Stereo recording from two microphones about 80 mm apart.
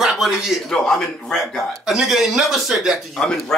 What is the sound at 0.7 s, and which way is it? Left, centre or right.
A man's voice, centre.